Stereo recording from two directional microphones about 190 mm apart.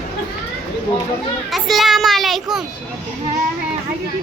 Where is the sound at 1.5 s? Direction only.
Centre (ahead or behind).